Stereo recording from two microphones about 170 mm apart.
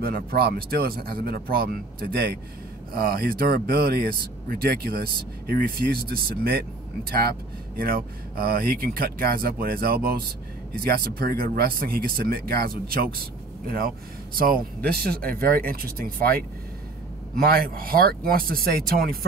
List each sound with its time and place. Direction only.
0.0 s speech: 65° right (ahead or behind)